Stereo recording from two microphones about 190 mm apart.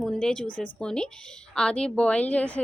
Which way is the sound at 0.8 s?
5° left (ahead or behind).